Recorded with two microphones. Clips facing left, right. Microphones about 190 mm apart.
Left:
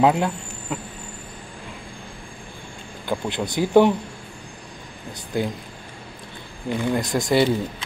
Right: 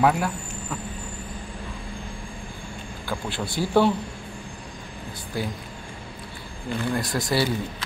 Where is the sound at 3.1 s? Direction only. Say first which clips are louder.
Left 5 dB; 20° left (ahead or behind).